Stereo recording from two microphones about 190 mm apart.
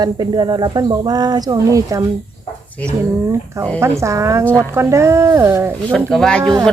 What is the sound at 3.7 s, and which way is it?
Speech, 15° right (ahead or behind).